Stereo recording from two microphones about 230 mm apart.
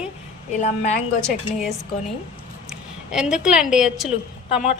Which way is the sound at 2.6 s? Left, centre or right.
Centre.